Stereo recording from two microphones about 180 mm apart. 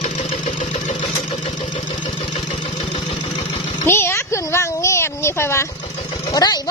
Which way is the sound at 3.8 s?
15° left (ahead or behind).